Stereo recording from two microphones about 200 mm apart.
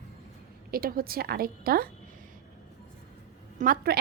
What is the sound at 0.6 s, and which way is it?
A woman's voice, 50° right (ahead or behind).